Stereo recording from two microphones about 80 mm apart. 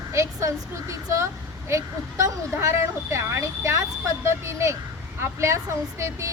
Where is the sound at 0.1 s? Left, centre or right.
Right.